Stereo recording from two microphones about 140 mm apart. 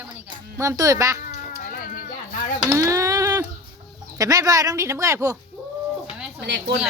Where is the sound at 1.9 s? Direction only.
80° left.